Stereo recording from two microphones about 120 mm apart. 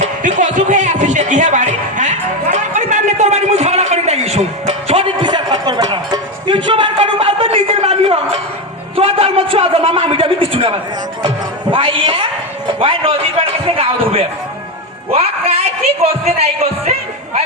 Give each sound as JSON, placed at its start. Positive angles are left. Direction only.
{"t": 0.2, "sound": "music", "side_deg": -90}
{"t": 9.0, "sound": "a sound", "side_deg": -50}
{"t": 15.1, "sound": "music", "side_deg": -55}
{"t": 16.0, "sound": "speech", "side_deg": -60}